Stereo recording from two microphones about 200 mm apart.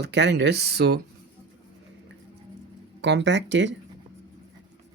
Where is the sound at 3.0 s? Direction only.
60° right (ahead or behind).